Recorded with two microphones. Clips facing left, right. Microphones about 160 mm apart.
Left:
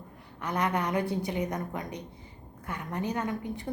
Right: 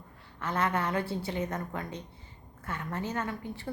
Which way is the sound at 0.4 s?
15° left (ahead or behind).